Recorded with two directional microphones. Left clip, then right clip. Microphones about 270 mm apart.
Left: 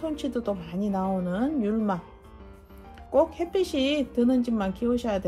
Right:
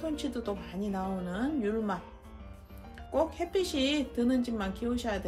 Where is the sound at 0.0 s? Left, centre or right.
Left.